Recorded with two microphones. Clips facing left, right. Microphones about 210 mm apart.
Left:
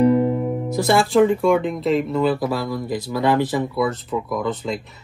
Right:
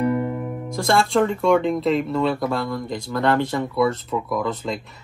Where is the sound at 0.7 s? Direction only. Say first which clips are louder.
Left 3 dB; 5° left (ahead or behind).